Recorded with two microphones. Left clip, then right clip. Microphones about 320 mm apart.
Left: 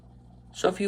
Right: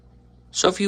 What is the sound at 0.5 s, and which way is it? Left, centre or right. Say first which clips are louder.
Speech: right 6 dB; centre.